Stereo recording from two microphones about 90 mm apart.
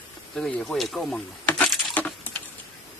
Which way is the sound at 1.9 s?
20° left (ahead or behind).